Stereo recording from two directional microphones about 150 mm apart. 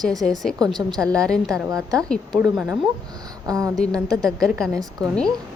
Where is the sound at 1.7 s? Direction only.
25° right (ahead or behind).